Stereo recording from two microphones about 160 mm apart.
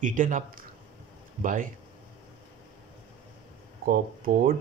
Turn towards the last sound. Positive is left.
turn(degrees=-60)  # may be behind; listen again after turning